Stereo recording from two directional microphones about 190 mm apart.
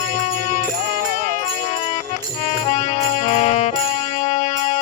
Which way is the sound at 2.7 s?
35° left (ahead or behind).